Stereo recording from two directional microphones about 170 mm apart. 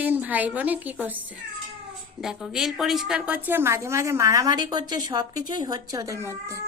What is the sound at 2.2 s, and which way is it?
A woman's voice, 5° right (ahead or behind).